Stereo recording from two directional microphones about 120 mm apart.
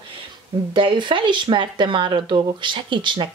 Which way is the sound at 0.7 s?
45° right (ahead or behind).